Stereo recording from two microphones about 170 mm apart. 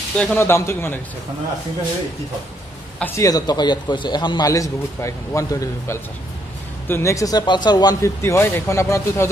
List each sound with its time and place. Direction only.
0.2 s speech: 10° left (ahead or behind)
3.0 s a man's voice: 20° left (ahead or behind)